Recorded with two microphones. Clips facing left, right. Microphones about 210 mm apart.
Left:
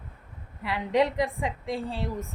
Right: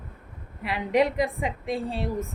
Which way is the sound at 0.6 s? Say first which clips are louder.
Right 1 dB; 20° right (ahead or behind).